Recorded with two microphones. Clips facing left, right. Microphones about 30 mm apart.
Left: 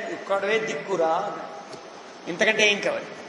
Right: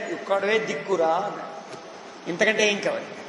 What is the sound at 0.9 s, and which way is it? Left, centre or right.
Speech, centre.